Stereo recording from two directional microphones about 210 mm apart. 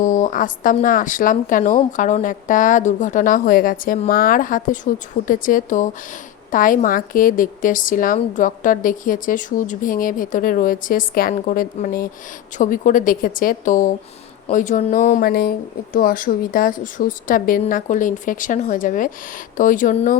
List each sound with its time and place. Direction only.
0.0 s speech: 40° left (ahead or behind)